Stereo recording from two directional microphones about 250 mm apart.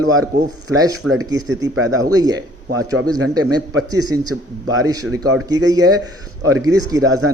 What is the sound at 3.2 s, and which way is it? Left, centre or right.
Speech, right.